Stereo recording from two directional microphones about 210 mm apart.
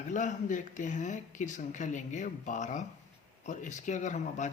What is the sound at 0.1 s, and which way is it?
Speech, 35° left (ahead or behind).